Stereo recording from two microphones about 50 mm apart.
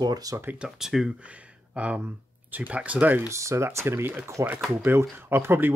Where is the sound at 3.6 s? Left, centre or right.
Right.